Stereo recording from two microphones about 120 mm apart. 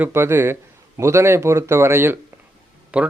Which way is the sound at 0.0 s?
20° right (ahead or behind).